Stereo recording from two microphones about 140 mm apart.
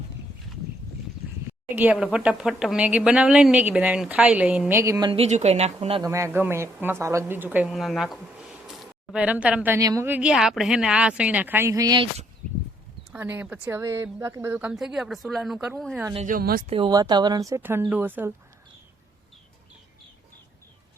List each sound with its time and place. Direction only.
1.7 s speech: 10° right (ahead or behind)
5.1 s speech: 50° right (ahead or behind)
6.0 s speech: 20° right (ahead or behind)
7.7 s a woman's voice: centre (ahead or behind)
9.7 s speech: 25° right (ahead or behind)
10.1 s speech: 5° right (ahead or behind); by 11.9 s 25° right (ahead or behind)
13.1 s speech: 10° right (ahead or behind)
14.6 s speech: 5° right (ahead or behind)
16.2 s speech: 85° right
16.6 s speech: 40° right (ahead or behind)
16.9 s speech: 30° right (ahead or behind)